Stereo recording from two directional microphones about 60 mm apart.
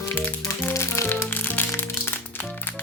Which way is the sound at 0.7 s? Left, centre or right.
Left.